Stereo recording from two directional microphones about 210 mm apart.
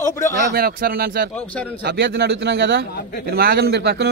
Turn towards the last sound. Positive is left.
turn(degrees=-50)  # may be behind; listen again after turning